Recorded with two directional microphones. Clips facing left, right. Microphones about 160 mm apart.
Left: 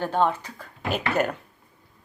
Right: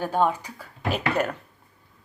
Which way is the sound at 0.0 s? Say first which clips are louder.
Even; 10° right (ahead or behind).